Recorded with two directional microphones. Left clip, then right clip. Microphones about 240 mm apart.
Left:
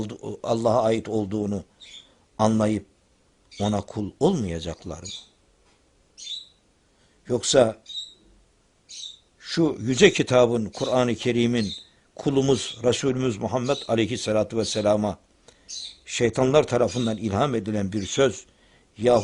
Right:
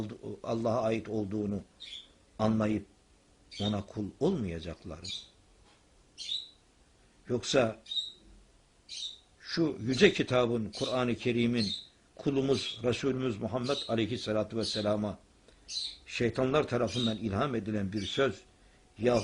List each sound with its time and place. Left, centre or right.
0.0 s speech: left
7.3 s speech: left
9.4 s speech: left